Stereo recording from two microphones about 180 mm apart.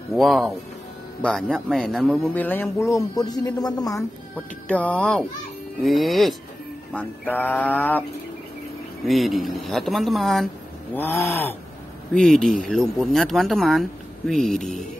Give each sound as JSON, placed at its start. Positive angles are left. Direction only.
{"t": 0.1, "sound": "speech", "side_deg": 0}
{"t": 4.6, "sound": "speech", "side_deg": 10}
{"t": 9.0, "sound": "speech", "side_deg": 0}
{"t": 11.0, "sound": "speech", "side_deg": 10}